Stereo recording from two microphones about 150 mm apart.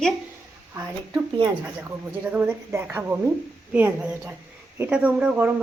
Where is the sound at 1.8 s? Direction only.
10° right (ahead or behind).